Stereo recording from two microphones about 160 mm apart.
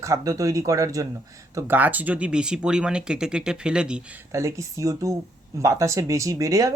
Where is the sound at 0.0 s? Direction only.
20° right (ahead or behind).